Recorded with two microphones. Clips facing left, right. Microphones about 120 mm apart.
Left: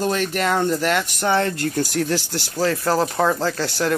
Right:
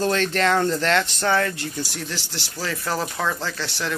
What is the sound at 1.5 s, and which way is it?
Speech, 50° left (ahead or behind).